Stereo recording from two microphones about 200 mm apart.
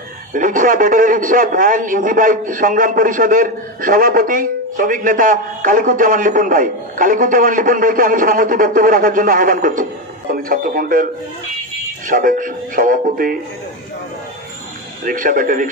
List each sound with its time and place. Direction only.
0.3 s a man's voice: 45° right (ahead or behind)
12.1 s a man's voice: 45° right (ahead or behind)
15.0 s a man's voice: 45° right (ahead or behind)